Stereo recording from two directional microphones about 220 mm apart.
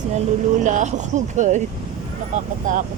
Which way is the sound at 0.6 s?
35° right (ahead or behind).